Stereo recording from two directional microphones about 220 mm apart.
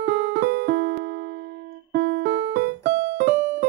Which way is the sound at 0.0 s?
45° right (ahead or behind).